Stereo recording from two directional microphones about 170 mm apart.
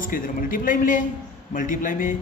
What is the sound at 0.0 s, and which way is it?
A man's voice, 55° left (ahead or behind).